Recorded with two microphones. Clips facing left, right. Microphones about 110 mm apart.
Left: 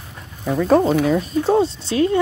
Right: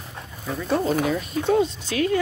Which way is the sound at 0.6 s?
40° left (ahead or behind).